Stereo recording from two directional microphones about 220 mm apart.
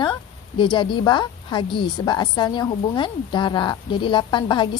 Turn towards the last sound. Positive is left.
turn(degrees=20)  # may be behind; listen again after turning